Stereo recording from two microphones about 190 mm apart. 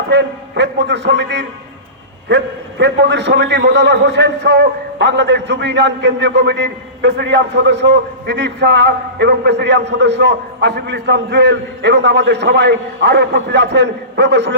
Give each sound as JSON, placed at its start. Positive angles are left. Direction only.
{"t": 0.1, "sound": "a man's voice", "side_deg": -65}